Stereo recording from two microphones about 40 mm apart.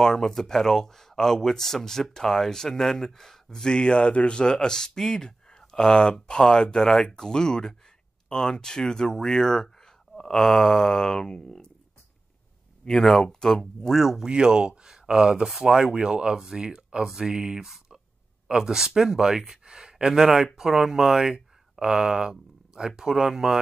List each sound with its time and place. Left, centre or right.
0.0 s speech: centre
4.6 s speech: centre
12.8 s speech: centre
13.9 s speech: centre
15.4 s speech: centre